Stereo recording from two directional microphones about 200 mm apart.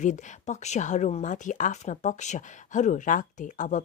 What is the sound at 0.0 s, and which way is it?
Speech, 40° left (ahead or behind).